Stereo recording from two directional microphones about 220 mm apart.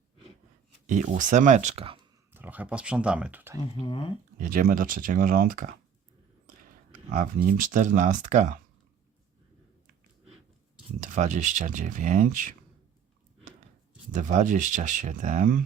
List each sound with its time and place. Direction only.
0.9 s speech: 35° right (ahead or behind)
2.3 s speech: 10° right (ahead or behind)
3.8 s speech: 25° left (ahead or behind)
4.4 s speech: 40° right (ahead or behind)
7.1 s speech: 40° right (ahead or behind)
11.0 s speech: 35° right (ahead or behind)
14.1 s speech: 35° right (ahead or behind)